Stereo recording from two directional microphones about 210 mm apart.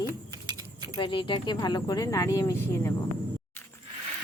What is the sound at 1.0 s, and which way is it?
Speech, 25° left (ahead or behind).